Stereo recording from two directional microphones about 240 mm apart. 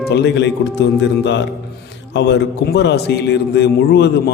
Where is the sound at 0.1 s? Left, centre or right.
Left.